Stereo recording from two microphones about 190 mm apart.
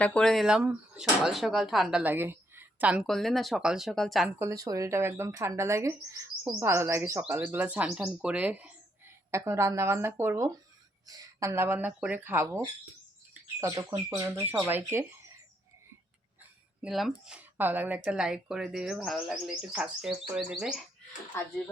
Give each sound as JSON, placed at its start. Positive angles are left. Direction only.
{"t": 0.0, "sound": "speech", "side_deg": 5}
{"t": 4.4, "sound": "speech", "side_deg": -15}
{"t": 16.4, "sound": "a sound", "side_deg": -5}
{"t": 17.2, "sound": "speech", "side_deg": -10}